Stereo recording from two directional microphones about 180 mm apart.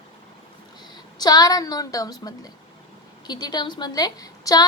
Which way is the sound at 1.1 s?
20° left (ahead or behind).